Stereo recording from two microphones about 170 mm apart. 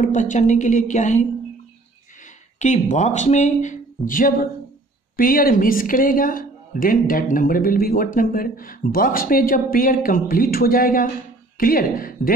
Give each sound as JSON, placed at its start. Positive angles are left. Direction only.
{"t": 0.0, "sound": "speech", "side_deg": 45}
{"t": 2.6, "sound": "speech", "side_deg": 45}